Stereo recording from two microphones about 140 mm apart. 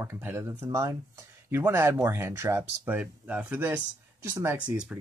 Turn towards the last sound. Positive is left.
turn(degrees=-20)  # may be behind; listen again after turning